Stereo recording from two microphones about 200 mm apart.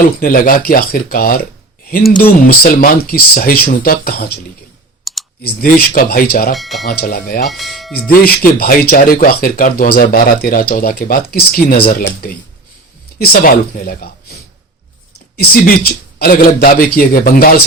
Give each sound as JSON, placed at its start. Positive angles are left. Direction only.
{"t": 0.2, "sound": "speech", "side_deg": 45}
{"t": 5.1, "sound": "clicking", "side_deg": 0}
{"t": 5.4, "sound": "speech", "side_deg": 50}
{"t": 6.5, "sound": "speech", "side_deg": 0}
{"t": 6.8, "sound": "speech", "side_deg": 50}
{"t": 7.4, "sound": "speech", "side_deg": 0}
{"t": 7.9, "sound": "speech", "side_deg": 50}
{"t": 15.4, "sound": "speech", "side_deg": 50}